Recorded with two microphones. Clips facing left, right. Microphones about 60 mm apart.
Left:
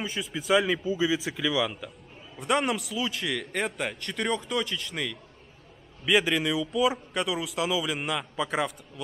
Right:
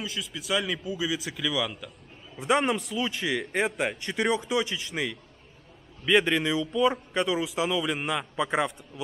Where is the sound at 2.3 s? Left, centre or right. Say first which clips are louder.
Right 2 dB; centre.